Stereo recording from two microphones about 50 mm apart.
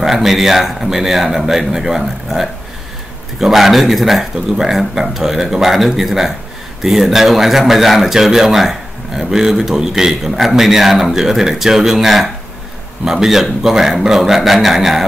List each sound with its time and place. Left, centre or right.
0.0 s speech: centre